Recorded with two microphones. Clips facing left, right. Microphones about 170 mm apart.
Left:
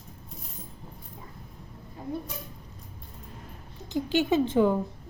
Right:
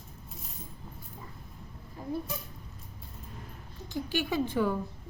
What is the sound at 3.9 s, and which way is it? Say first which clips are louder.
Speech: left 7 dB; 20° left (ahead or behind).